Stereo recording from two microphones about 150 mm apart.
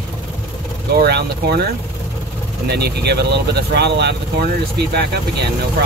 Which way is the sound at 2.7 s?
90° right.